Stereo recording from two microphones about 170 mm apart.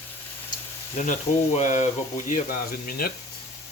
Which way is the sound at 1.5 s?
45° left (ahead or behind).